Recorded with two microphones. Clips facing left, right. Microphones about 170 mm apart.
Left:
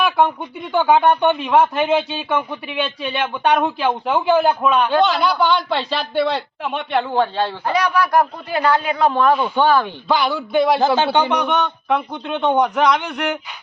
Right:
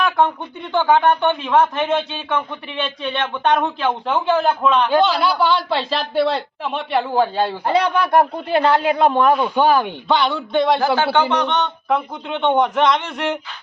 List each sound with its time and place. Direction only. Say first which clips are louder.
0.0 s speech: left 1 dB; 10° left (ahead or behind)
4.9 s a man's voice: even; centre (ahead or behind)
7.7 s speech: right 1 dB; 25° right (ahead or behind)
10.1 s a man's voice: even; centre (ahead or behind)
10.8 s a man's voice: left 1 dB; 20° left (ahead or behind); by 13.4 s centre (ahead or behind)